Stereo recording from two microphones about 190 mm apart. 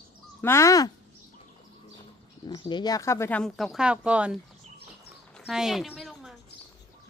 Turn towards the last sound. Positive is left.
turn(degrees=0)  # may be behind; listen again after turning